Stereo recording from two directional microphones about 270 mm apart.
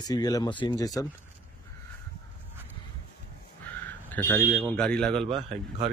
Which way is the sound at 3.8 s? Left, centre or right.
Centre.